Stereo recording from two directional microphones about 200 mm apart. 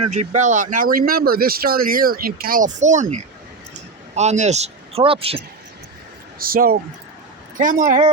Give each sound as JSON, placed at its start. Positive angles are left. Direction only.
{"t": 0.1, "sound": "a man's voice", "side_deg": -35}
{"t": 6.4, "sound": "speech", "side_deg": -45}